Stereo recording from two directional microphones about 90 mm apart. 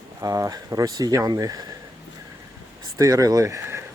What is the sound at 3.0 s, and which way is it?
Speech, 40° right (ahead or behind).